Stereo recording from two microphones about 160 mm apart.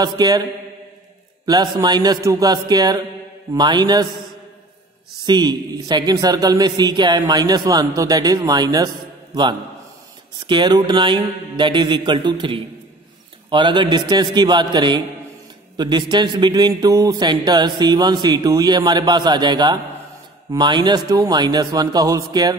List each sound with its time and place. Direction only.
0.0 s a man's voice: 25° right (ahead or behind)
5.2 s a man's voice: 25° right (ahead or behind)